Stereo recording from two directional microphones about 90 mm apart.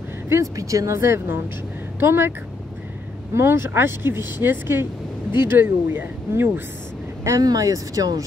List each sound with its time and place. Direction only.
0.3 s speech: 35° right (ahead or behind)
3.3 s speech: 25° right (ahead or behind)
7.2 s speech: 40° right (ahead or behind)